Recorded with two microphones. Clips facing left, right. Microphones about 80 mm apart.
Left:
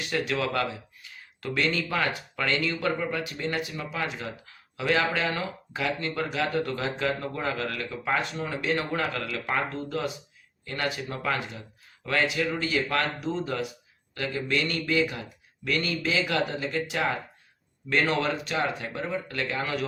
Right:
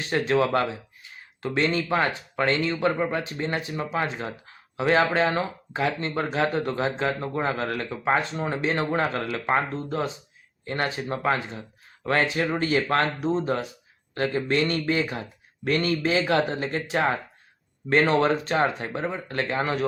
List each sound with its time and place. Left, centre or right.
0.0 s speech: right